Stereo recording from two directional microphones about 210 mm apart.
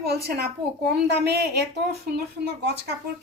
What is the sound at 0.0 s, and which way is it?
Speech, 50° right (ahead or behind).